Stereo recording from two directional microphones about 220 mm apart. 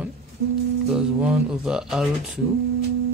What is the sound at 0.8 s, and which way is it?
Speech, 5° right (ahead or behind).